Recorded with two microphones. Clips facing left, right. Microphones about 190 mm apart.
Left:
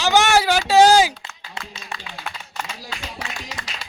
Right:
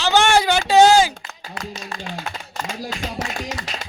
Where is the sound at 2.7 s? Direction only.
50° right (ahead or behind).